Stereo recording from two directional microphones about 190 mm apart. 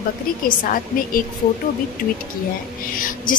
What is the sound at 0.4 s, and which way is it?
Speech, 45° left (ahead or behind).